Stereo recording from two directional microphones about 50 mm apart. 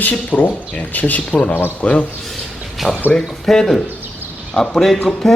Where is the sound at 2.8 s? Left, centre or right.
Right.